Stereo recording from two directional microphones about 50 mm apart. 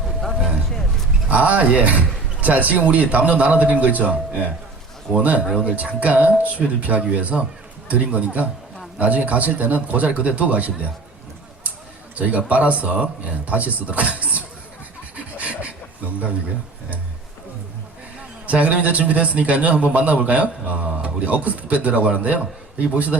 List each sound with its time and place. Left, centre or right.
1.3 s a man's voice: right
12.1 s speech: right
15.1 s beatboxing: right
18.4 s a man's voice: right